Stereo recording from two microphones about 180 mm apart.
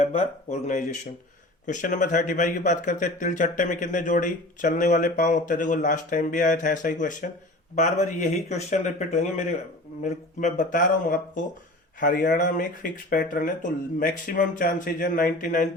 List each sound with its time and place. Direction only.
0.0 s speech: 35° left (ahead or behind)